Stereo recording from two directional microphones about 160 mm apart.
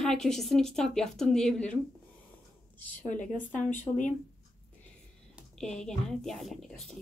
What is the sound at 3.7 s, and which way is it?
Speech, 50° left (ahead or behind).